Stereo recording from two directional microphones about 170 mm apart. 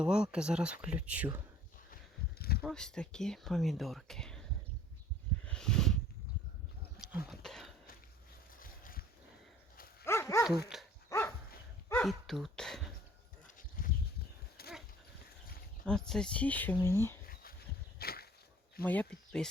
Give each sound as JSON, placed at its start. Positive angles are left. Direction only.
{"t": 0.0, "sound": "speech", "side_deg": -5}
{"t": 2.6, "sound": "speech", "side_deg": 0}
{"t": 5.5, "sound": "a sound", "side_deg": 5}
{"t": 7.3, "sound": "cough", "side_deg": 0}
{"t": 8.5, "sound": "boat", "side_deg": 55}
{"t": 10.0, "sound": "dog", "side_deg": 15}
{"t": 10.7, "sound": "dog", "side_deg": 0}
{"t": 11.1, "sound": "dog", "side_deg": 20}
{"t": 11.9, "sound": "dog", "side_deg": 5}
{"t": 13.6, "sound": "a sound", "side_deg": 55}
{"t": 14.6, "sound": "dog", "side_deg": 65}
{"t": 15.9, "sound": "speech", "side_deg": 5}
{"t": 18.0, "sound": "a sound", "side_deg": 65}
{"t": 18.9, "sound": "speech", "side_deg": 5}